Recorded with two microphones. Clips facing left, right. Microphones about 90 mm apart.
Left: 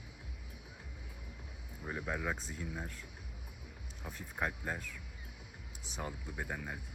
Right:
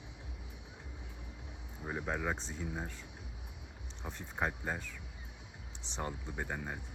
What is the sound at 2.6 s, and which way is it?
Speech, 25° right (ahead or behind).